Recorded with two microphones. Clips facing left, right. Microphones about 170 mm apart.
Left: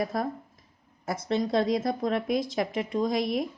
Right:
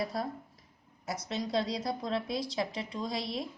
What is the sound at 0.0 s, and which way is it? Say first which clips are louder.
A woman's voice: left 5 dB; 50° left (ahead or behind).